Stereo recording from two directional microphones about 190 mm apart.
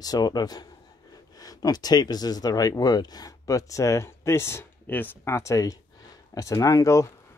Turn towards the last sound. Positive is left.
turn(degrees=15)  # may be behind; listen again after turning